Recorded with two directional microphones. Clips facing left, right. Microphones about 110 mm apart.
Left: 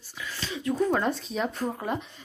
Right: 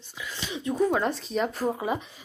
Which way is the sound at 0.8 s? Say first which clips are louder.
Right 2 dB; 5° right (ahead or behind).